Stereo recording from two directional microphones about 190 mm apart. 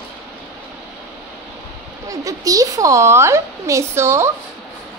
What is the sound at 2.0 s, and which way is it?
A woman's voice, 20° right (ahead or behind).